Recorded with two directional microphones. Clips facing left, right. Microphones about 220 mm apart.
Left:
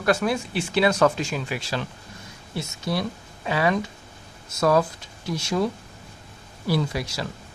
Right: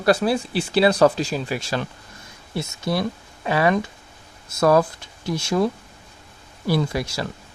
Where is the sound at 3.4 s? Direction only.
55° right (ahead or behind).